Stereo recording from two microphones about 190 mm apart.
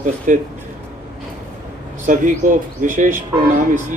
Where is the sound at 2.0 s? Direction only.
45° right (ahead or behind).